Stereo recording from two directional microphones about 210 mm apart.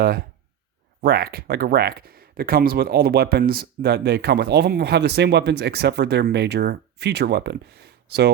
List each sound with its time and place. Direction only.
1.0 s speech: 45° right (ahead or behind)